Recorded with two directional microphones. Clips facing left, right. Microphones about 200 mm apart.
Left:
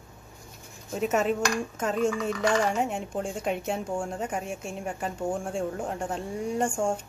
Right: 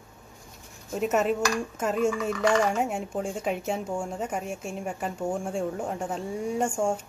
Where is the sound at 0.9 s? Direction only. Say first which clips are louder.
Right 1 dB; centre (ahead or behind).